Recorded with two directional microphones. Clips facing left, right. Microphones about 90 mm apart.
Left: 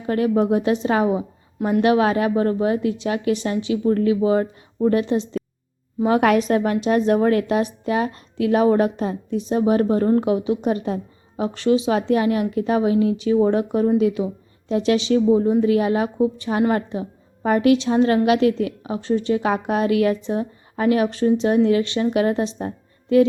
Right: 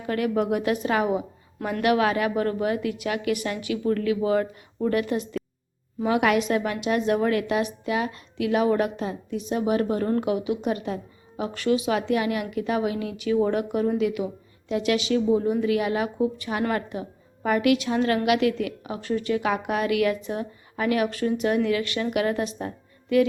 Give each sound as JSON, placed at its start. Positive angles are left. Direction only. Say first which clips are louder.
{"t": 0.0, "sound": "a woman's voice", "louder": "left 5 dB", "side_deg": 30}
{"t": 6.0, "sound": "a woman's voice", "louder": "left 5 dB", "side_deg": 35}